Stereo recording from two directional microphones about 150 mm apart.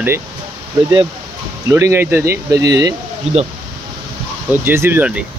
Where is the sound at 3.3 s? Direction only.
45° right (ahead or behind).